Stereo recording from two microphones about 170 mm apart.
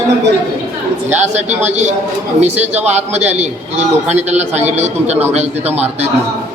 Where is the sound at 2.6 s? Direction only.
10° right (ahead or behind).